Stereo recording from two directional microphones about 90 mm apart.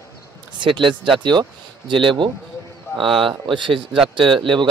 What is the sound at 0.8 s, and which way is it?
Speech, 65° right (ahead or behind).